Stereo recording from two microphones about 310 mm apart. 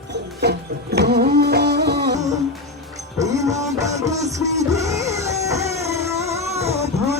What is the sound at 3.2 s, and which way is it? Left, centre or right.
Music, centre.